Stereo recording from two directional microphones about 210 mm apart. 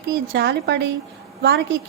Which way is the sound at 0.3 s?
50° right (ahead or behind).